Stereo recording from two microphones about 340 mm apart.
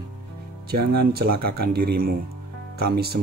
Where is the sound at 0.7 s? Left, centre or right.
Right.